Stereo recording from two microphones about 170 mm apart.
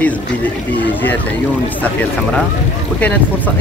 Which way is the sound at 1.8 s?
10° left (ahead or behind).